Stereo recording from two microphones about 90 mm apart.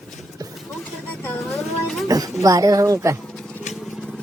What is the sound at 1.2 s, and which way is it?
Vehicle, 25° left (ahead or behind).